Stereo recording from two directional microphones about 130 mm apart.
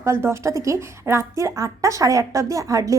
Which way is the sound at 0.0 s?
20° right (ahead or behind).